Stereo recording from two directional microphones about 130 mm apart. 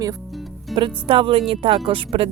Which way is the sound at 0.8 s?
45° right (ahead or behind).